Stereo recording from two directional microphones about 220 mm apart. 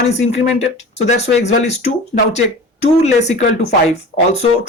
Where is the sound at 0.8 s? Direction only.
30° left (ahead or behind).